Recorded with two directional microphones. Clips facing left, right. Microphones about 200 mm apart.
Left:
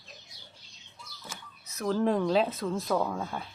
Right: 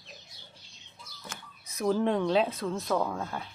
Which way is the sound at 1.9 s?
Centre (ahead or behind).